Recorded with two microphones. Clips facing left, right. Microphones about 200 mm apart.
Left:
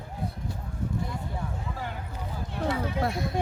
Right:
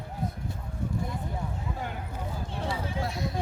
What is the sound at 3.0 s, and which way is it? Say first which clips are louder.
Speech: left 4 dB; 55° left (ahead or behind).